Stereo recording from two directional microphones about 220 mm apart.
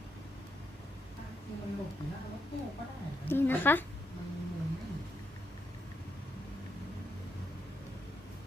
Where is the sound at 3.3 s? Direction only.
10° left (ahead or behind).